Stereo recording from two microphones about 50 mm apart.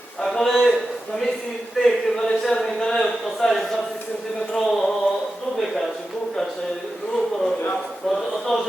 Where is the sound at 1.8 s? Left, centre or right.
Centre.